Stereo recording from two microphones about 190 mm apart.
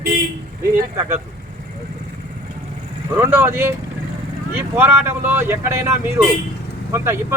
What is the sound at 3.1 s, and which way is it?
Speech, 15° right (ahead or behind).